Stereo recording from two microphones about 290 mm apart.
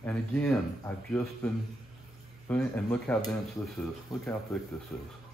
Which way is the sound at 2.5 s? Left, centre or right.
Centre.